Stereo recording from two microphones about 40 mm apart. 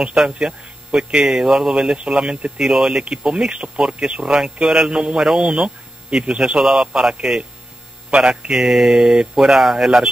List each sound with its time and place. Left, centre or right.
0.0 s speech: right
2.6 s speech: centre
9.4 s speech: centre